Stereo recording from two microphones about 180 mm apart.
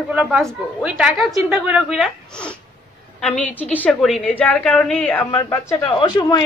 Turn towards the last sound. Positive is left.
turn(degrees=20)  # may be behind; listen again after turning